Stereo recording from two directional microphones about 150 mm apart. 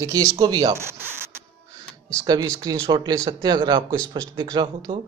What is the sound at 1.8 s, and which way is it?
Speech, 20° right (ahead or behind).